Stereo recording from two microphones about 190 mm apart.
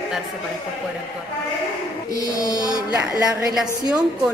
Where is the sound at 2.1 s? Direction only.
20° left (ahead or behind).